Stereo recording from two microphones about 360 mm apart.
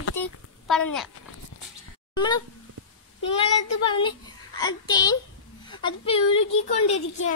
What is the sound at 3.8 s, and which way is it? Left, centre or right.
A child's voice, centre.